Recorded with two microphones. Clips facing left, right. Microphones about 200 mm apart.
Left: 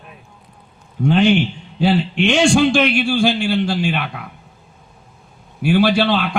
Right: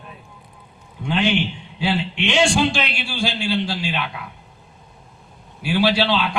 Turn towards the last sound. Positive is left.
turn(degrees=55)  # may be behind; listen again after turning